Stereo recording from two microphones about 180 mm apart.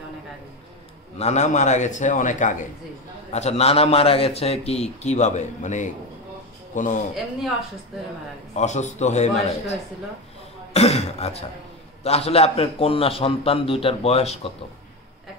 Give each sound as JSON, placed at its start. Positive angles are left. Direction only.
{"t": 1.1, "sound": "a man's voice", "side_deg": 40}
{"t": 8.5, "sound": "a man's voice", "side_deg": 40}